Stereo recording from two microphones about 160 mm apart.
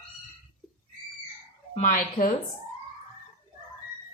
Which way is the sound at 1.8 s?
55° left (ahead or behind).